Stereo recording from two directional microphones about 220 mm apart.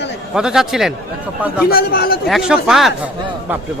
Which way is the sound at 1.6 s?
45° left (ahead or behind).